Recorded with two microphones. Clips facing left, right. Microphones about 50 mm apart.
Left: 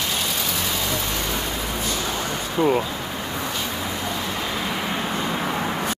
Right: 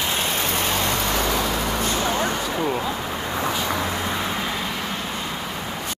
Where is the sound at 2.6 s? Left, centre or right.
Centre.